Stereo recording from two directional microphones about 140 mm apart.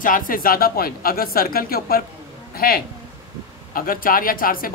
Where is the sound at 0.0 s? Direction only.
80° left.